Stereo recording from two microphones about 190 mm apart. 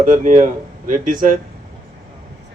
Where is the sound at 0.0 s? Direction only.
40° right (ahead or behind).